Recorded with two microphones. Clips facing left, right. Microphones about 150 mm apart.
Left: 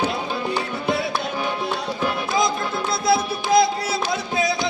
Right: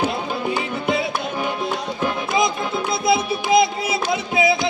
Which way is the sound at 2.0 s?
20° right (ahead or behind).